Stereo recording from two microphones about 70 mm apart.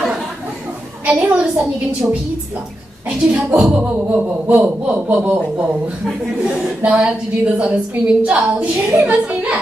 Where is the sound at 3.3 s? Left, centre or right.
Centre.